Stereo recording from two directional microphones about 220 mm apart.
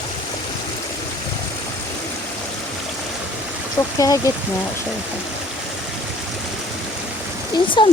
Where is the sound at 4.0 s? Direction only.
15° left (ahead or behind).